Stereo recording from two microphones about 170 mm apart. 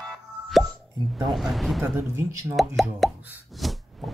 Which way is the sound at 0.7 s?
Centre (ahead or behind).